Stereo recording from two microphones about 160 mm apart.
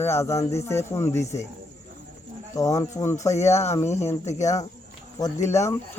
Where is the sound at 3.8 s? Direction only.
45° left (ahead or behind).